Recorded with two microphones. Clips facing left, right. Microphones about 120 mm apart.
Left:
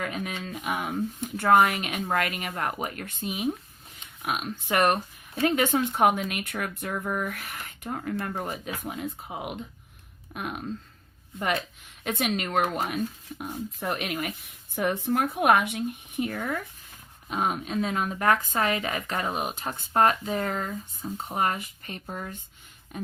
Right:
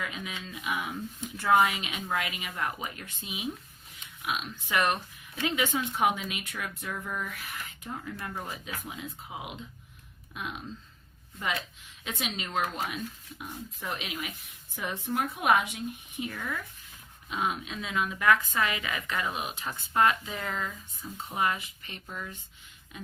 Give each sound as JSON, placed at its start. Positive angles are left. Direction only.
{"t": 0.0, "sound": "speech", "side_deg": 50}
{"t": 12.0, "sound": "a woman's voice", "side_deg": 55}